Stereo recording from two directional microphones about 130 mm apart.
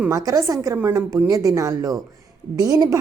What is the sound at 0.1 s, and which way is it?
A woman's voice, 25° right (ahead or behind).